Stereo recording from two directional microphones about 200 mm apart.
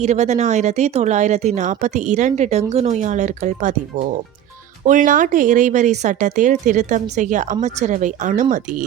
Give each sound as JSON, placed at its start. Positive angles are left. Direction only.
{"t": 0.0, "sound": "speech", "side_deg": -35}